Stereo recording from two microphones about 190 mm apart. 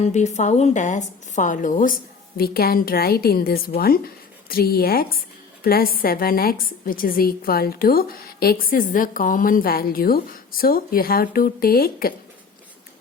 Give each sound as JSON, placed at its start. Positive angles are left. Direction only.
{"t": 0.0, "sound": "a woman's voice", "side_deg": 35}